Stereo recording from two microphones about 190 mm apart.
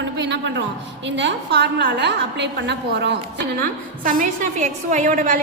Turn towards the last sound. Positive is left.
turn(degrees=-45)  # may be behind; listen again after turning